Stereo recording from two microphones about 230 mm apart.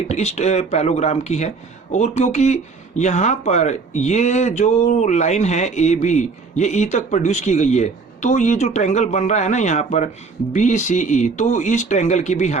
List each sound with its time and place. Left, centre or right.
0.1 s speech: left